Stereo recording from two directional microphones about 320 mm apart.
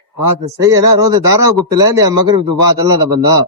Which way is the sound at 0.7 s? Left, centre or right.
Centre.